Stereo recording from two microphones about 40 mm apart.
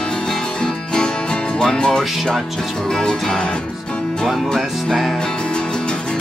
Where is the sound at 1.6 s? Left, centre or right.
Centre.